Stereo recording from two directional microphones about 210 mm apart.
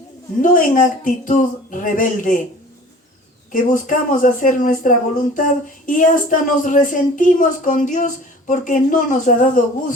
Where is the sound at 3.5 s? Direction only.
40° left (ahead or behind).